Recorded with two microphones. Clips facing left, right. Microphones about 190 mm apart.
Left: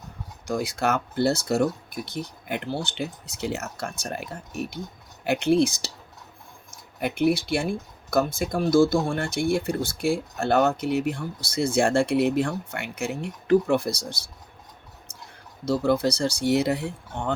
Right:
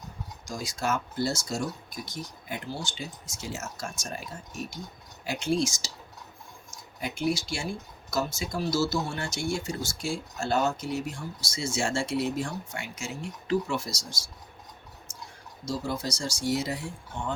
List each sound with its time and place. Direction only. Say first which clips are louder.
0.4 s speech: left 6 dB; 60° left (ahead or behind)
15.6 s speech: left 9 dB; 60° left (ahead or behind)